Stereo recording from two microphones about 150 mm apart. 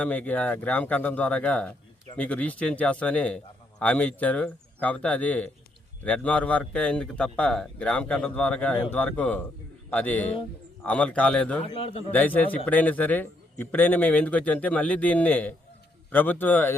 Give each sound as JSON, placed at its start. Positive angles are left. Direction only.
{"t": 0.0, "sound": "a man's voice", "side_deg": 10}
{"t": 11.6, "sound": "a man's voice", "side_deg": 40}
{"t": 12.1, "sound": "a man's voice", "side_deg": 10}